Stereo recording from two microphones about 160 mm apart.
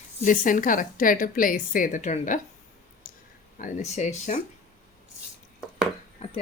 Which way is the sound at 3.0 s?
60° left (ahead or behind).